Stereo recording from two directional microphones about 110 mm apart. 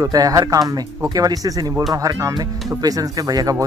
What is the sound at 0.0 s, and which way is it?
Speech, 30° right (ahead or behind).